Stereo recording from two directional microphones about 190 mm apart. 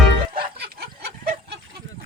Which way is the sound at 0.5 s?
60° right (ahead or behind).